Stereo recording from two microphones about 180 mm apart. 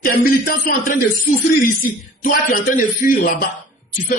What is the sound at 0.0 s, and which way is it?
Speech, 50° left (ahead or behind).